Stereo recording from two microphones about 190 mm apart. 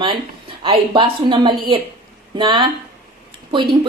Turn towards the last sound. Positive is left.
turn(degrees=-25)  # may be behind; listen again after turning